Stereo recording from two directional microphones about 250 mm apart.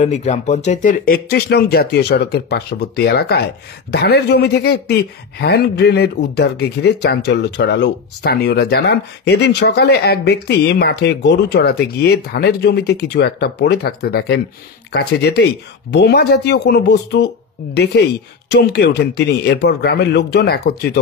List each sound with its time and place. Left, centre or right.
0.0 s speech: left
18.5 s speech: left